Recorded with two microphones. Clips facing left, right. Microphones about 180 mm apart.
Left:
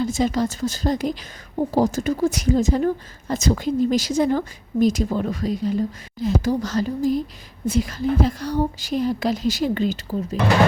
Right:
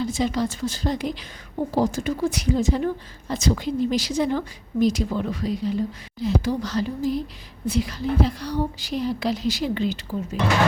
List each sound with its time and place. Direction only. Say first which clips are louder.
0.0 s speech: left 3 dB; 45° left (ahead or behind)